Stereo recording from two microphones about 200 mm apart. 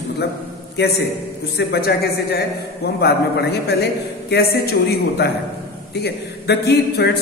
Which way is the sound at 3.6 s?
55° left (ahead or behind).